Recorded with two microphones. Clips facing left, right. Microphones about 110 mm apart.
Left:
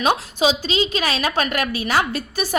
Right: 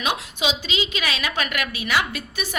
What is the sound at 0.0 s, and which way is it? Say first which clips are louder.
A woman's voice: left 7 dB; 35° left (ahead or behind).